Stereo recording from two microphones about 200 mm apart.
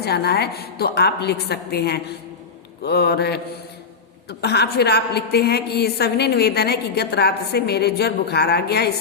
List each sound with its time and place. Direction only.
0.0 s a woman's voice: 55° left (ahead or behind)
2.8 s a sound: 55° left (ahead or behind)
4.3 s a woman's voice: 55° left (ahead or behind)